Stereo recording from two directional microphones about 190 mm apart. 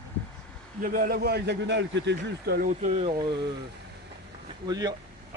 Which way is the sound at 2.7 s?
35° right (ahead or behind).